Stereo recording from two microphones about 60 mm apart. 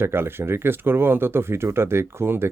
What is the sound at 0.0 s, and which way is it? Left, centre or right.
Speech, right.